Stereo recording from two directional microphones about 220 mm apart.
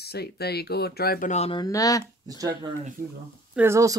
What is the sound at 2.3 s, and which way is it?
Speech, 15° right (ahead or behind).